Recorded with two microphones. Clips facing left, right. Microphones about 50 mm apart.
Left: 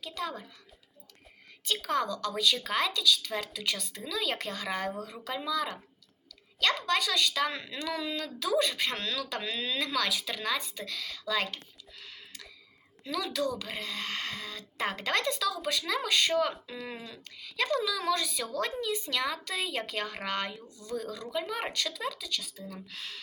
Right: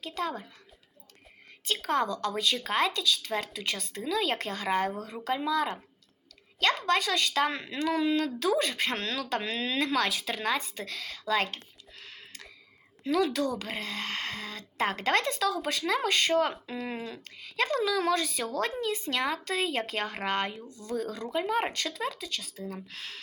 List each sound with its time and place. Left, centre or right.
0.0 s a woman's voice: right
1.6 s a woman's voice: right
6.6 s a woman's voice: right
12.0 s a sound: right
13.1 s a woman's voice: right